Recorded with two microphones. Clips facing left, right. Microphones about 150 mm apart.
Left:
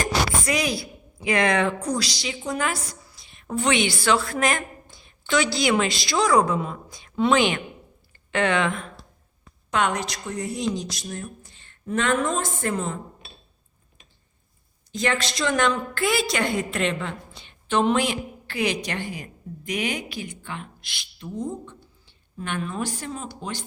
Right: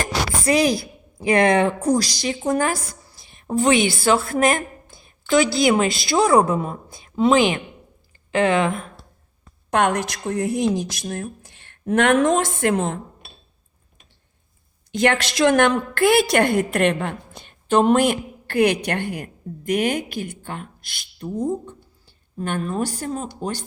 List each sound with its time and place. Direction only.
0.4 s a woman's voice: 35° right (ahead or behind)
2.0 s a woman's voice: 45° right (ahead or behind)
4.2 s a woman's voice: 30° right (ahead or behind)
5.3 s a woman's voice: 45° right (ahead or behind)
5.7 s a woman's voice: 30° right (ahead or behind)
9.6 s a woman's voice: 55° right (ahead or behind)
14.9 s a woman's voice: 65° right (ahead or behind); by 23.6 s 40° right (ahead or behind)